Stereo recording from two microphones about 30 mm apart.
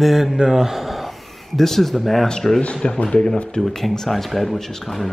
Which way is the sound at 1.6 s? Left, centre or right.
Centre.